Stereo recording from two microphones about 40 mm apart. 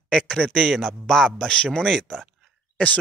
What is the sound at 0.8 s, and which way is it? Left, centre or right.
Speech, centre.